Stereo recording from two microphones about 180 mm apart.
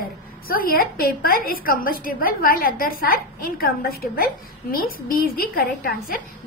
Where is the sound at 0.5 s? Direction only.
55° left (ahead or behind).